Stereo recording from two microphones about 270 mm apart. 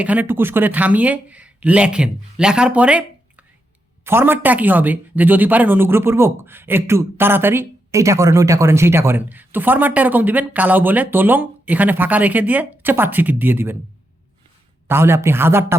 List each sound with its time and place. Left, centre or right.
0.0 s speech: centre
14.8 s speech: centre